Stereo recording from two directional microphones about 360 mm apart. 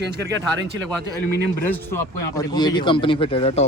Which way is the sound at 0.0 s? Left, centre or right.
Right.